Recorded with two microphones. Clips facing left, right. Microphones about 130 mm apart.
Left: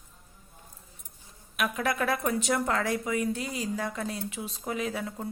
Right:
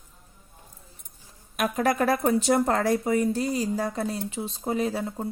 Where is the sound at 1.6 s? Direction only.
40° right (ahead or behind).